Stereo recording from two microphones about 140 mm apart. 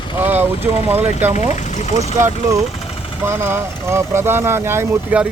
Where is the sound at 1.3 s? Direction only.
55° left (ahead or behind).